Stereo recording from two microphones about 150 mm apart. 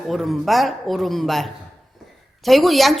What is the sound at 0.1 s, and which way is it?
A woman's voice, centre (ahead or behind).